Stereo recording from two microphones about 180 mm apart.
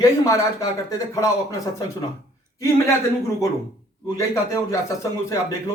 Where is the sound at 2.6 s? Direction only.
15° left (ahead or behind).